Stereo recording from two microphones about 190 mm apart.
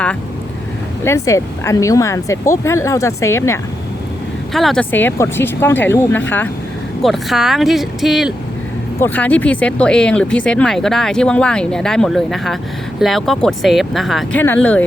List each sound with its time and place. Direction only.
1.0 s speech: 15° left (ahead or behind)
4.5 s speech: centre (ahead or behind)
9.0 s speech: 10° left (ahead or behind)